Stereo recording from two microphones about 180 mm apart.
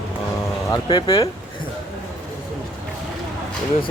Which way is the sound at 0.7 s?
25° left (ahead or behind).